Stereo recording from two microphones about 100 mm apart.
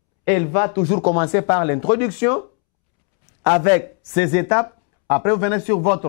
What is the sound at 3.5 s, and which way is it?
Speech, 15° left (ahead or behind).